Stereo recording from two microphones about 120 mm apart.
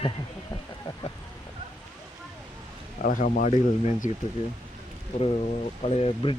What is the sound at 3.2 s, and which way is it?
Speech, 75° left (ahead or behind).